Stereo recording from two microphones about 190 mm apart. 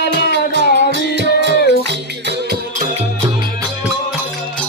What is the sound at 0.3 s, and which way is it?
Music, 70° right (ahead or behind).